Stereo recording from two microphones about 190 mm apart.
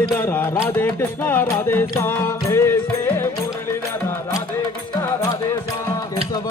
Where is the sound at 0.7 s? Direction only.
10° left (ahead or behind).